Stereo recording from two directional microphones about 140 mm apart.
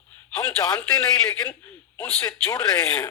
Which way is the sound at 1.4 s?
10° left (ahead or behind).